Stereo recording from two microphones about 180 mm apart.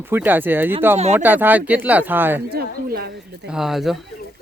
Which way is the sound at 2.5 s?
60° right (ahead or behind).